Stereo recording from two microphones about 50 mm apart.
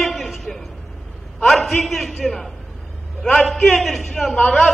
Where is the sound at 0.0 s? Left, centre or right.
Centre.